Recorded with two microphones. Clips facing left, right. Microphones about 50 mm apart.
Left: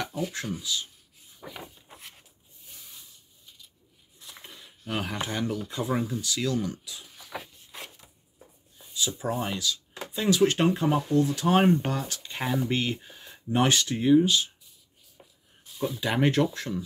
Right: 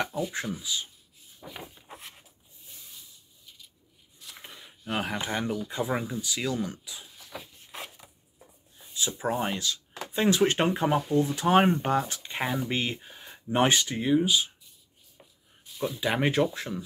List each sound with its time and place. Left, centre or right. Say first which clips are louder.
0.6 s speech: left 1 dB; centre
4.4 s a sound: right 1 dB; centre
4.9 s speech: right 1 dB; centre
7.3 s a sound: left 4 dB; left
8.9 s speech: right 1 dB; right
13.9 s speech: left 3 dB; centre
15.8 s speech: left 1 dB; centre